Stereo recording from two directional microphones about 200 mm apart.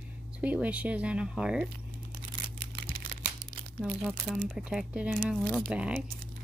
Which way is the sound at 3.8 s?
5° right (ahead or behind).